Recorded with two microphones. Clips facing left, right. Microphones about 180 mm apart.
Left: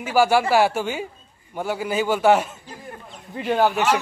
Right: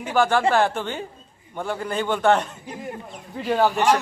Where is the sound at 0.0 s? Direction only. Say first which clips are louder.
Left 1 dB; 10° left (ahead or behind).